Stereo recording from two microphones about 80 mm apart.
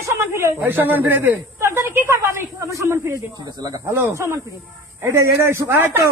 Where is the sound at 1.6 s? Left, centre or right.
Right.